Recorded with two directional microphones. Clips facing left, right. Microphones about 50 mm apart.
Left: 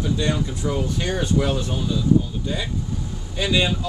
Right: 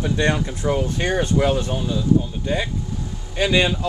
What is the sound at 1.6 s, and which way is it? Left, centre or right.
Speech, right.